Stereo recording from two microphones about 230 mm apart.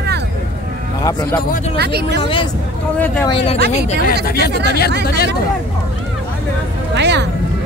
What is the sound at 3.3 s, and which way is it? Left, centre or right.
Speech, left.